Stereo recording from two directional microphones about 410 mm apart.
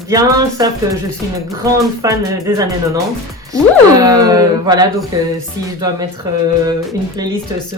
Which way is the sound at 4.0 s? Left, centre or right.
Centre.